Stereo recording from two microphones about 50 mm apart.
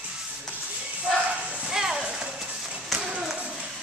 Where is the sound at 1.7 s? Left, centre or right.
Centre.